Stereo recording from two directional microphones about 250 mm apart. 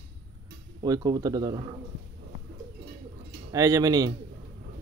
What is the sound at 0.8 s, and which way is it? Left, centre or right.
Speech, centre.